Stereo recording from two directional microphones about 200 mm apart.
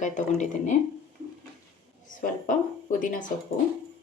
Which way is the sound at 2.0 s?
40° left (ahead or behind).